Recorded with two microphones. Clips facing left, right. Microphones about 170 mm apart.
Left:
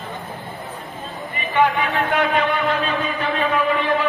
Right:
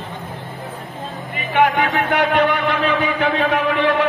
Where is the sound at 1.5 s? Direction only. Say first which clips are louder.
Right 2 dB; 70° right (ahead or behind).